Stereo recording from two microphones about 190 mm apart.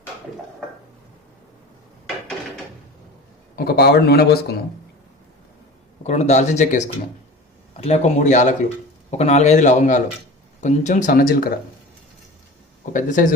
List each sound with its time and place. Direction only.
3.5 s a man's voice: 50° left (ahead or behind)
6.0 s a man's voice: 35° left (ahead or behind)
12.8 s speech: 45° left (ahead or behind)